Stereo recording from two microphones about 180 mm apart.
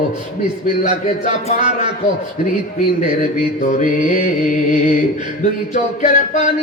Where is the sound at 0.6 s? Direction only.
40° left (ahead or behind).